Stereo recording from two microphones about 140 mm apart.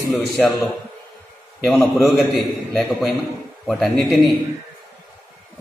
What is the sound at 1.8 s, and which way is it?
Speech, 15° left (ahead or behind).